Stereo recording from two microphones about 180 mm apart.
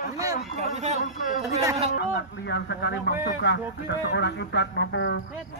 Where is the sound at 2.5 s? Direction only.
70° left (ahead or behind).